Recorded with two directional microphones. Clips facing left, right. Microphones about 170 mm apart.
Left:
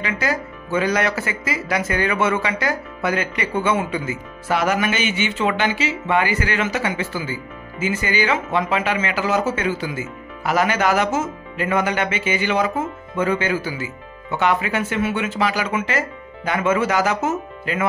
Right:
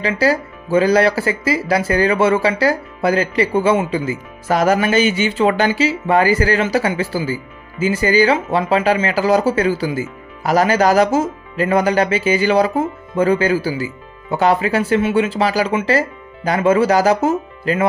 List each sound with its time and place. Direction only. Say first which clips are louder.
0.0 s speech: right 7 dB; 35° right (ahead or behind)